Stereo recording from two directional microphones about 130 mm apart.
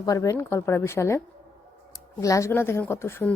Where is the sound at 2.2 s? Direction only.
25° left (ahead or behind).